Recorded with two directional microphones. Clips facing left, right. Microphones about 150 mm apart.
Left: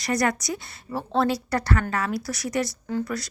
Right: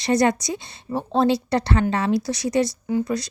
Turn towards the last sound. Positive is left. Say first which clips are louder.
# right 5 dB
turn(degrees=-20)  # may be behind; listen again after turning